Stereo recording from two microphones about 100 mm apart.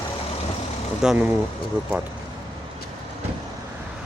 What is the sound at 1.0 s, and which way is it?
Speech, 10° right (ahead or behind).